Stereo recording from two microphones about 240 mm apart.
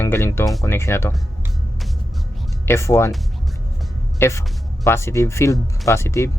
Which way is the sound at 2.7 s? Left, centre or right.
Centre.